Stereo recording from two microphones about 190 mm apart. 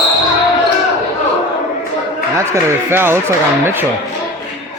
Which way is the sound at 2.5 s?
10° right (ahead or behind).